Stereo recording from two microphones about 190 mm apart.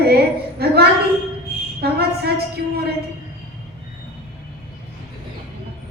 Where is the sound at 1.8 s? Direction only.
55° right (ahead or behind).